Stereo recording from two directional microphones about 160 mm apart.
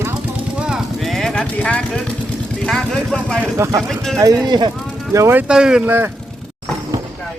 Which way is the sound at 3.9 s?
5° left (ahead or behind).